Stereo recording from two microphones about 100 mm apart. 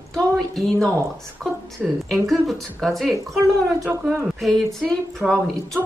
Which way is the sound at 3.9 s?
20° right (ahead or behind).